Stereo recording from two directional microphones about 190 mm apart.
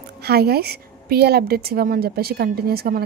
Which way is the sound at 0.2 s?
55° right (ahead or behind).